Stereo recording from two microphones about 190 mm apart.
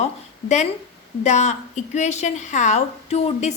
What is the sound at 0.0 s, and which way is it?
A woman's voice, 35° left (ahead or behind).